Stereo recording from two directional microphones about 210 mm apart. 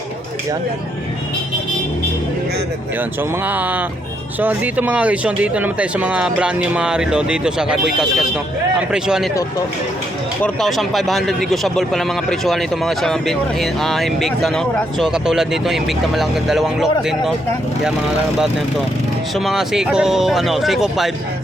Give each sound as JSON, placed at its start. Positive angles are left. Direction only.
{"t": 3.0, "sound": "speech", "side_deg": -10}
{"t": 10.4, "sound": "speech", "side_deg": 0}
{"t": 19.3, "sound": "speech", "side_deg": 0}